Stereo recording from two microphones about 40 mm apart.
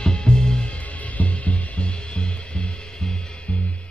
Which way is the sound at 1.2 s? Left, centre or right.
Left.